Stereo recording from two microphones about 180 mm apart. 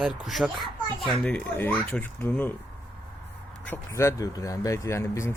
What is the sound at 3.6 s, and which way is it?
Speech, 15° left (ahead or behind).